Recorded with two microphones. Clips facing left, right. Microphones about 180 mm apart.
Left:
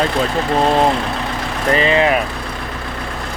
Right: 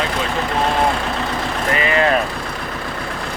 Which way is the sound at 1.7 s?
25° left (ahead or behind).